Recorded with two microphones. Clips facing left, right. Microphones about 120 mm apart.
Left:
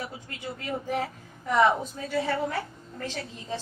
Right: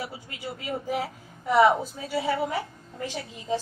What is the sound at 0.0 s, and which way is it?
A woman's voice, 10° right (ahead or behind).